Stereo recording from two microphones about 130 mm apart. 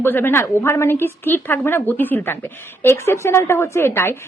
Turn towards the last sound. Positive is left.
turn(degrees=20)  # may be behind; listen again after turning